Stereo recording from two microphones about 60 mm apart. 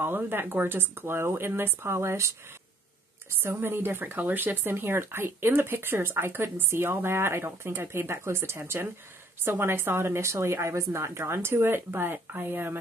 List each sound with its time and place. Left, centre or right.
0.0 s speech: right
3.3 s a woman's voice: right